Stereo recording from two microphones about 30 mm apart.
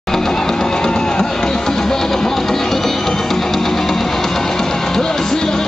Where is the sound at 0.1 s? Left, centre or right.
Centre.